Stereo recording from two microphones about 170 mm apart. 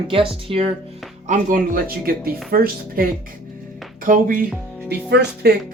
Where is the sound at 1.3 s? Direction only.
50° right (ahead or behind).